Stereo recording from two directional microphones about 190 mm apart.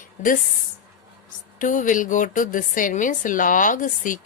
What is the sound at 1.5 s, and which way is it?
Speech, 45° left (ahead or behind).